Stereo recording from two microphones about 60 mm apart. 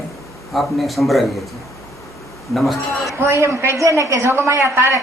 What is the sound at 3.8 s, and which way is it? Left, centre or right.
Speech, right.